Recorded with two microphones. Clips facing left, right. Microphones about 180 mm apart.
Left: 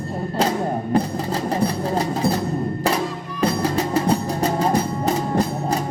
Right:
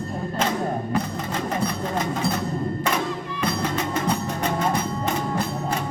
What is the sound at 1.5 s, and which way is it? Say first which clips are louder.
Music: left 5 dB; 35° left (ahead or behind).